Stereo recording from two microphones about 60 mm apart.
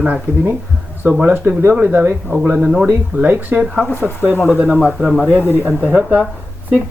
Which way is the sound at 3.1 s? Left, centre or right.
Right.